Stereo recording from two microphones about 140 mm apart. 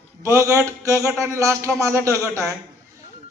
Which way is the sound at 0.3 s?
20° right (ahead or behind).